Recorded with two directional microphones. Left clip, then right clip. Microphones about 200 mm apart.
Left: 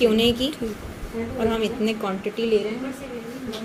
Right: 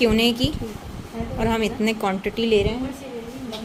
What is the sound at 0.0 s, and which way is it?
A woman's voice, 35° right (ahead or behind).